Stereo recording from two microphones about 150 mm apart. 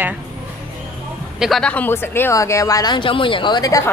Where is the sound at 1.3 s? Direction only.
Centre (ahead or behind).